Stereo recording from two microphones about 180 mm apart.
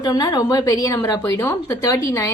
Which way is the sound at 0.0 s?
20° left (ahead or behind).